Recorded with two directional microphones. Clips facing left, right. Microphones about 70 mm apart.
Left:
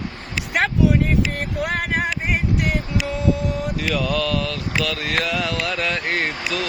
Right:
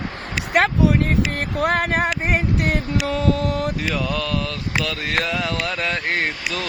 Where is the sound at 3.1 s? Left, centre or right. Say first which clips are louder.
Right 1 dB; right.